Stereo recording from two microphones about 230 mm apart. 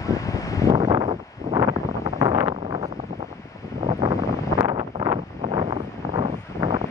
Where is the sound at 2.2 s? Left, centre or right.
Centre.